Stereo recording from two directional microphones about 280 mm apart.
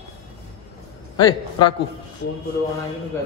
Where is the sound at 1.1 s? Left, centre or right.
Centre.